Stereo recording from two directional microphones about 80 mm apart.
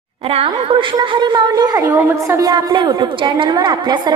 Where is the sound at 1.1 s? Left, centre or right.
Right.